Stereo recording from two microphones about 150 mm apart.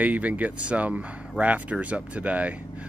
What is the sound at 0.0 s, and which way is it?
Speech, 10° right (ahead or behind).